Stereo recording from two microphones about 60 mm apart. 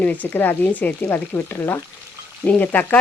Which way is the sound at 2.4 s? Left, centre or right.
Left.